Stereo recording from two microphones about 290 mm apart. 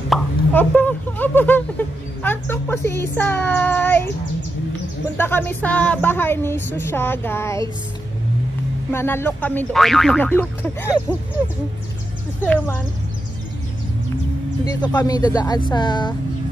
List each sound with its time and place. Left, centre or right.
0.1 s speech: centre
5.1 s speech: centre
8.9 s speech: centre
12.4 s speech: centre
14.8 s speech: centre